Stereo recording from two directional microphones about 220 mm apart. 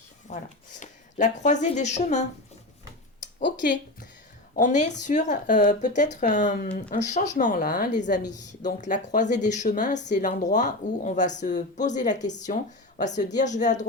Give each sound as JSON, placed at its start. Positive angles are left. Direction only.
{"t": 0.3, "sound": "speech", "side_deg": 35}
{"t": 4.5, "sound": "speech", "side_deg": 35}